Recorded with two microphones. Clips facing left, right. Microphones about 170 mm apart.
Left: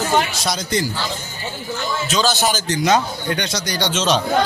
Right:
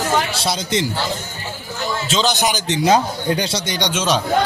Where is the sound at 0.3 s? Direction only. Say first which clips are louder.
Right 1 dB; 30° right (ahead or behind).